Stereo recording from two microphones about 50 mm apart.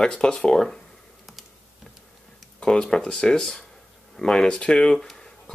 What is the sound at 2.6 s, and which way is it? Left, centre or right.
Speech, centre.